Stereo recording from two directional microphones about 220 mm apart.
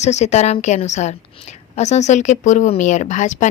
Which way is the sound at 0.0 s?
30° left (ahead or behind).